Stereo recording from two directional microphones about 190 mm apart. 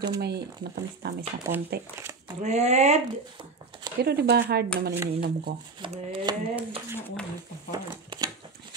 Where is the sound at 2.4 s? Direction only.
35° right (ahead or behind).